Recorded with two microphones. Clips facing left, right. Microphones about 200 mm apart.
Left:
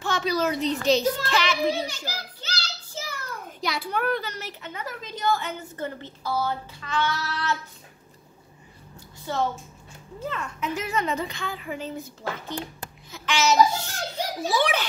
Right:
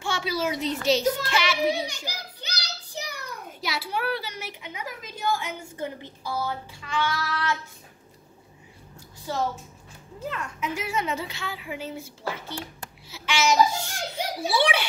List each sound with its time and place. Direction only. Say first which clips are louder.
0.0 s a woman's voice: left 3 dB; 10° right (ahead or behind)
2.0 s a sound: left 2 dB; 15° right (ahead or behind)
3.6 s a child's voice: left 2 dB; 5° right (ahead or behind)
9.2 s a woman's voice: left 1 dB; 5° right (ahead or behind)